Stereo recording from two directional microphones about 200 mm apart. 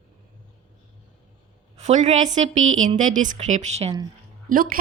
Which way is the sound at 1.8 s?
35° right (ahead or behind).